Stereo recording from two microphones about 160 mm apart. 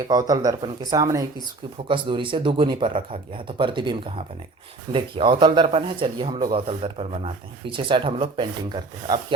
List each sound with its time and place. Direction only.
0.1 s speech: 25° right (ahead or behind)